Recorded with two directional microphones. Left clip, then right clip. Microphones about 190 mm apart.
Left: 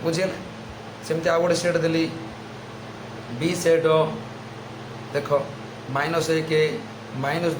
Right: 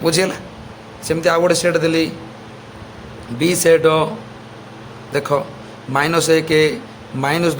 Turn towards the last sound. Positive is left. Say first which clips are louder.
# right 7 dB
turn(degrees=-55)  # may be behind; listen again after turning